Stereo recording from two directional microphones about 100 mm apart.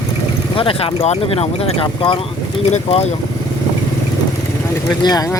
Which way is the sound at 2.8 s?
90° left.